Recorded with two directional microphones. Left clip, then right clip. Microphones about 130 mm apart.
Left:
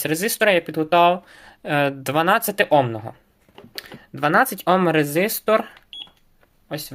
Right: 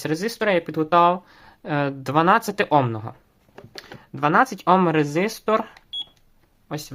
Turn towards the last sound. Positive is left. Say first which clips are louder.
# left 2 dB
turn(degrees=-45)  # may be behind; listen again after turning